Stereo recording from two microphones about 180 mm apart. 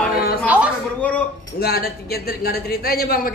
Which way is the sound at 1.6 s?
60° left (ahead or behind).